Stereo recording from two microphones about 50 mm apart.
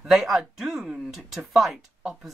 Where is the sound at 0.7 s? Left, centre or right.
Centre.